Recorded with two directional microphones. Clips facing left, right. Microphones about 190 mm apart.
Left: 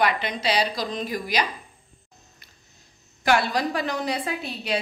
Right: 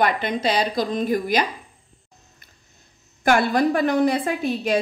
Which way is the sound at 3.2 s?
50° right (ahead or behind).